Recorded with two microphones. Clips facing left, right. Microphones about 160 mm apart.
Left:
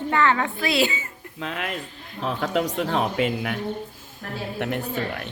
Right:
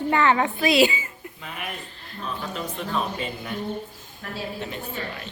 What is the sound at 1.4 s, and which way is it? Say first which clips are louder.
Speech: left 6 dB; 90° left.